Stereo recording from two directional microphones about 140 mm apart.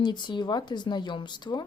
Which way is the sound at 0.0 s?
30° left (ahead or behind).